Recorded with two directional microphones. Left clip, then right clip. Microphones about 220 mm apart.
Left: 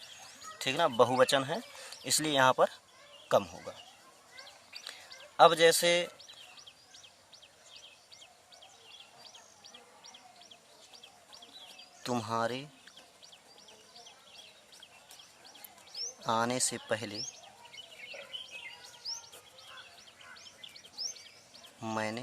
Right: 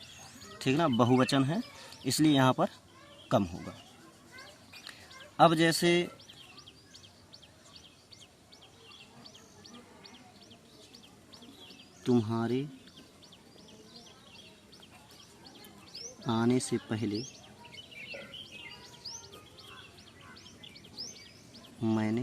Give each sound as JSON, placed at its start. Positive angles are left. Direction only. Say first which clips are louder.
{"t": 0.6, "sound": "speech", "louder": "left 1 dB", "side_deg": 15}
{"t": 5.4, "sound": "speech", "louder": "left 2 dB", "side_deg": 20}
{"t": 12.0, "sound": "speech", "louder": "right 2 dB", "side_deg": 35}
{"t": 16.2, "sound": "speech", "louder": "even", "side_deg": 35}
{"t": 21.8, "sound": "speech", "louder": "right 3 dB", "side_deg": 25}